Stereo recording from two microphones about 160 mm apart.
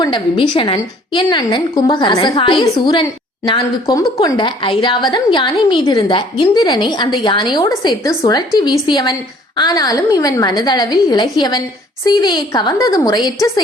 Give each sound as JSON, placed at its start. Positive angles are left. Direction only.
{"t": 0.0, "sound": "a woman's voice", "side_deg": 30}